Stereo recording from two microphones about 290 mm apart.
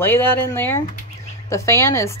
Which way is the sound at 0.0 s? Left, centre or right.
Centre.